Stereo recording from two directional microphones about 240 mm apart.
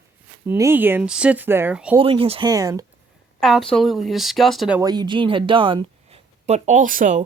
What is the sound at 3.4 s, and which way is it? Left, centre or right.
Speech, centre.